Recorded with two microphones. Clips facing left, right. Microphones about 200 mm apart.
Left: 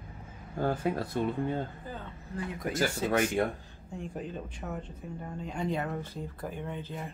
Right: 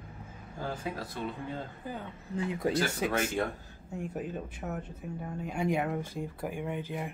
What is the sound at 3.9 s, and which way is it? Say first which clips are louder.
Speech: right 2 dB; 10° right (ahead or behind).